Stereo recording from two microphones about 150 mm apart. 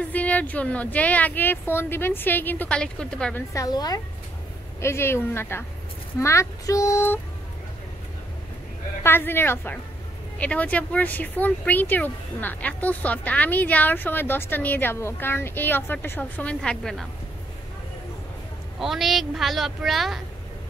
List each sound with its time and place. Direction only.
0.1 s speech: 10° left (ahead or behind)
3.5 s speech: 25° left (ahead or behind)
9.0 s speech: 15° left (ahead or behind)
18.8 s speech: centre (ahead or behind)